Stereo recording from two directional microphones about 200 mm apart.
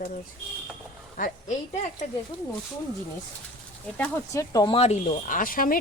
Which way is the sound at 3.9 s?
10° left (ahead or behind).